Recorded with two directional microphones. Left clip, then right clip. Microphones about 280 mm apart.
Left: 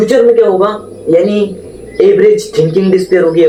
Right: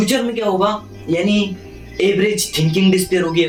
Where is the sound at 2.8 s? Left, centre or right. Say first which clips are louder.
Left 6 dB; right.